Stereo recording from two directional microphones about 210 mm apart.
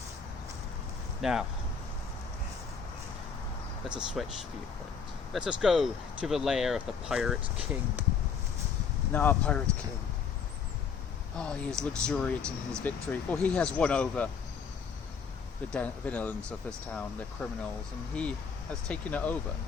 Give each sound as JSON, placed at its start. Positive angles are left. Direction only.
{"t": 1.2, "sound": "speech", "side_deg": 0}
{"t": 3.8, "sound": "speech", "side_deg": -5}
{"t": 5.3, "sound": "speech", "side_deg": -5}
{"t": 9.1, "sound": "speech", "side_deg": 5}
{"t": 11.3, "sound": "speech", "side_deg": 5}
{"t": 15.7, "sound": "speech", "side_deg": 5}